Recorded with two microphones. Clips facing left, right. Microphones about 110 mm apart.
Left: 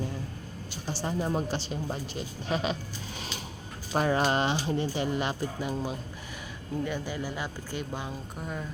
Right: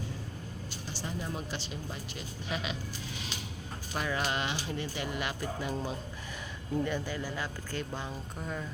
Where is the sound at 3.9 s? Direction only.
40° left (ahead or behind).